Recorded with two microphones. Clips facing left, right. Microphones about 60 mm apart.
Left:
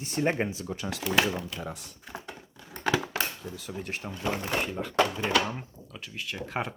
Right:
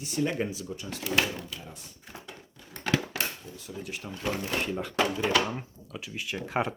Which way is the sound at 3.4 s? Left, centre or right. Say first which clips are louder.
Left 4 dB; left.